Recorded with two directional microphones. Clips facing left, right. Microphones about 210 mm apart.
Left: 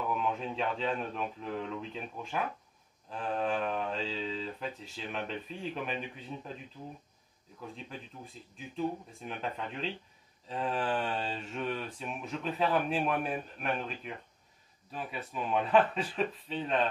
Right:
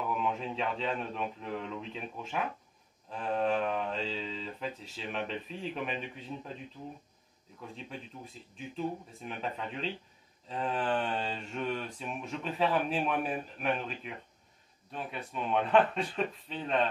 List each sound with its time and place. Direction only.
0.2 s speech: centre (ahead or behind)
7.7 s speech: centre (ahead or behind)